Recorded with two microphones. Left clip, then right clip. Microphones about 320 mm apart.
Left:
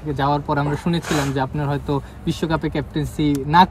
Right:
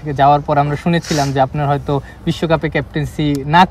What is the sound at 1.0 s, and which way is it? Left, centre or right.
Speech, centre.